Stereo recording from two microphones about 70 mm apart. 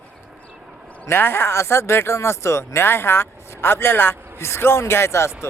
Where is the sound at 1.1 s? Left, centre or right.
Left.